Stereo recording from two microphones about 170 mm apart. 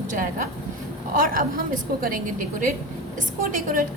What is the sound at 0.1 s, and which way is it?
A woman's voice, 50° right (ahead or behind).